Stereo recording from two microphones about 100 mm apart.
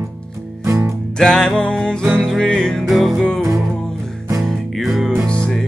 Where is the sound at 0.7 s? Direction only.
30° right (ahead or behind).